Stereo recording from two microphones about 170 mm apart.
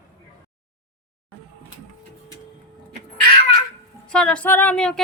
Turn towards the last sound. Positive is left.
turn(degrees=5)  # may be behind; listen again after turning